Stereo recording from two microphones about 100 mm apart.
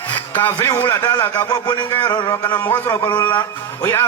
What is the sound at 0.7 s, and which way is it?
Speech, 25° left (ahead or behind).